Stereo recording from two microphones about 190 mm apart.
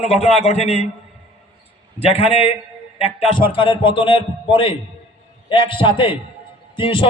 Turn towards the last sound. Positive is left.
turn(degrees=25)  # may be behind; listen again after turning